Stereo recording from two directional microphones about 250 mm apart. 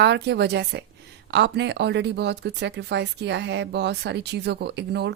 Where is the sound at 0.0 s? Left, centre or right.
Right.